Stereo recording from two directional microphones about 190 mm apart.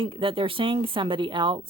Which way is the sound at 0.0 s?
25° right (ahead or behind).